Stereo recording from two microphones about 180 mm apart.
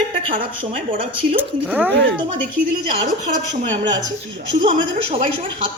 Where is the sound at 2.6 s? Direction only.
45° right (ahead or behind).